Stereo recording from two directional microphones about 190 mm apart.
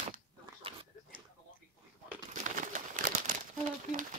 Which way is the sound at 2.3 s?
40° right (ahead or behind).